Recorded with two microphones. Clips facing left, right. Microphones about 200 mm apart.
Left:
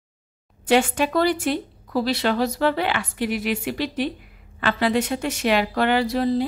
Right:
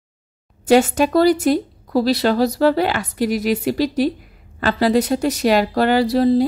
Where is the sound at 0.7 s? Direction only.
40° right (ahead or behind).